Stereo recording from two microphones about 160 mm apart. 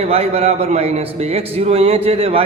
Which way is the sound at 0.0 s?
40° right (ahead or behind).